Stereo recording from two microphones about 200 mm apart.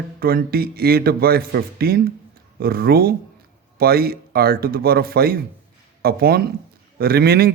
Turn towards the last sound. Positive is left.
turn(degrees=-50)  # may be behind; listen again after turning